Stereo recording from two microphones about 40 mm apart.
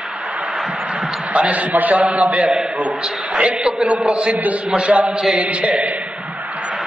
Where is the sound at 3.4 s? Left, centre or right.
Right.